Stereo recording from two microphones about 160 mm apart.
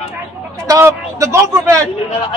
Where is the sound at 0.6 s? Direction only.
20° right (ahead or behind).